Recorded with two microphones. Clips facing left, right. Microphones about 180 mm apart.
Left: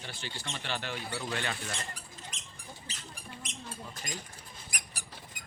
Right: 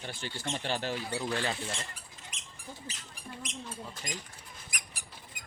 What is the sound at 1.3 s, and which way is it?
Speech, 30° right (ahead or behind).